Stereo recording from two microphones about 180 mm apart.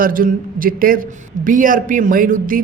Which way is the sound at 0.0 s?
50° right (ahead or behind).